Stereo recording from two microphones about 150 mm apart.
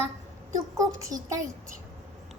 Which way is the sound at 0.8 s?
20° right (ahead or behind).